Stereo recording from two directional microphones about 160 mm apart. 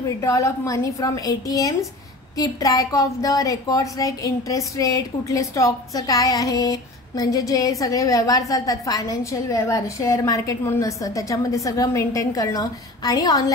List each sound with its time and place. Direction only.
0.2 s a woman's voice: 20° left (ahead or behind)